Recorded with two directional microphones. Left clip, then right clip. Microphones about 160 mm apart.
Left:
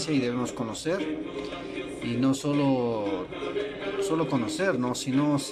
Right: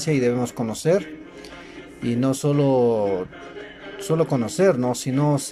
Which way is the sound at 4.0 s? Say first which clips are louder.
Right 6 dB; 40° right (ahead or behind).